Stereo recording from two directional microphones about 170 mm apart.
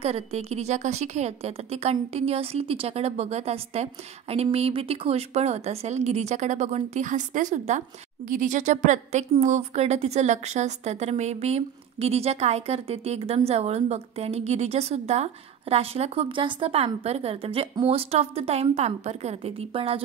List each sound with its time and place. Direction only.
0.0 s a woman's voice: 35° right (ahead or behind)